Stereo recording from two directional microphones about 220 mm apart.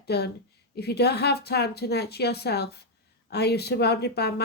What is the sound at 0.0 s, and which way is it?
A woman's voice, 45° left (ahead or behind).